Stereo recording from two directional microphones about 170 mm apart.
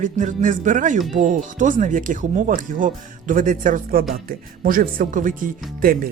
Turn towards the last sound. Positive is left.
turn(degrees=-55)  # may be behind; listen again after turning